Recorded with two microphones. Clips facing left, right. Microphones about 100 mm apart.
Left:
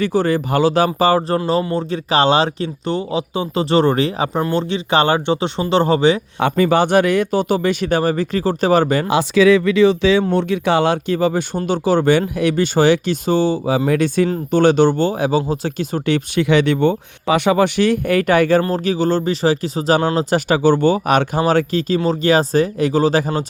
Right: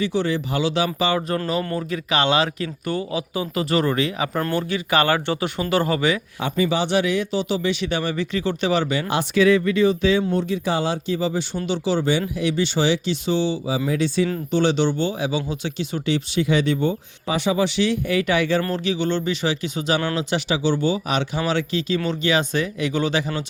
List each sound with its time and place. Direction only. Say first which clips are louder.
0.0 s speech: left 5 dB; 45° left (ahead or behind); by 6.2 s 30° left (ahead or behind)
6.4 s speech: left 7 dB; 55° left (ahead or behind)
9.1 s speech: left 4 dB; 90° left; by 23.5 s 40° left (ahead or behind)